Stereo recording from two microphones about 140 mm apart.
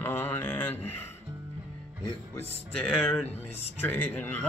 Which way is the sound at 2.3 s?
10° left (ahead or behind).